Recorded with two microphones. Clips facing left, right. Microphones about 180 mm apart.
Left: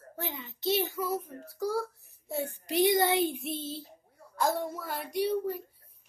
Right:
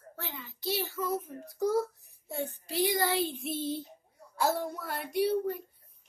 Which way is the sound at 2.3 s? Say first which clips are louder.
Left 3 dB; 10° left (ahead or behind).